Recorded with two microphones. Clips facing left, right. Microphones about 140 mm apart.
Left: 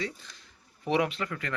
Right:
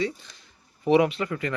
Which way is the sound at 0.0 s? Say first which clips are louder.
Right 7 dB; centre (ahead or behind).